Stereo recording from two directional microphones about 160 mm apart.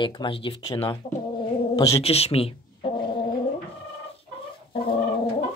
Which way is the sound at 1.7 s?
20° left (ahead or behind).